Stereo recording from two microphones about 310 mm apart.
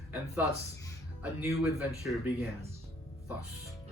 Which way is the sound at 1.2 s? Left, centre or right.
Centre.